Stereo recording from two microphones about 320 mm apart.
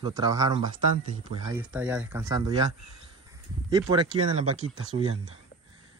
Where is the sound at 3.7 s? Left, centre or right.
Centre.